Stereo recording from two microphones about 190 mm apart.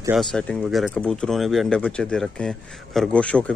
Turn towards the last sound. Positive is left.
turn(degrees=5)  # may be behind; listen again after turning